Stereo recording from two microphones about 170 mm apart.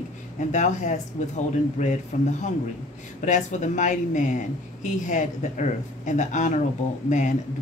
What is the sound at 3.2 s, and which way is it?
Speech, 45° left (ahead or behind).